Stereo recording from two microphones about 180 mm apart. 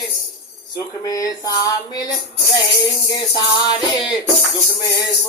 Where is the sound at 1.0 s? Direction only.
20° left (ahead or behind).